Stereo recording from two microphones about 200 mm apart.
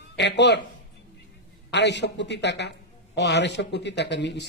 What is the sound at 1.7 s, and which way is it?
Speech, 60° left (ahead or behind).